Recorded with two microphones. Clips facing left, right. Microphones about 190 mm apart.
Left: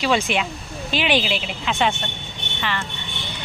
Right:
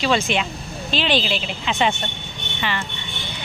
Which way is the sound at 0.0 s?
10° left (ahead or behind).